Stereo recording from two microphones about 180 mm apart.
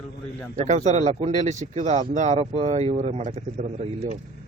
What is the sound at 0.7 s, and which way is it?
Speech, 40° right (ahead or behind).